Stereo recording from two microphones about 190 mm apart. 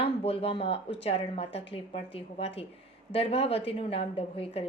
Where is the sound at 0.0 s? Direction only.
30° left (ahead or behind).